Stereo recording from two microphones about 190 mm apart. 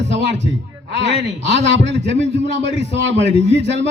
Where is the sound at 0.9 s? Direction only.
70° right (ahead or behind).